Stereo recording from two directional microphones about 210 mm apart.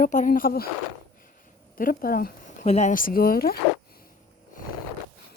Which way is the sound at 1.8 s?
45° left (ahead or behind).